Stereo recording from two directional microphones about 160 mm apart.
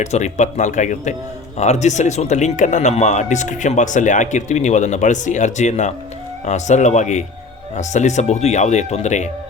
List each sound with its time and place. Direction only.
0.0 s a man's voice: 45° left (ahead or behind)